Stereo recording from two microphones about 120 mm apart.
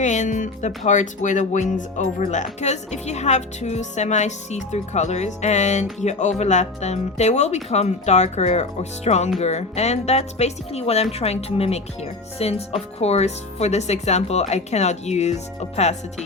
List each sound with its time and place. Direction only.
0.0 s speech: 85° left; by 16.0 s 65° left (ahead or behind)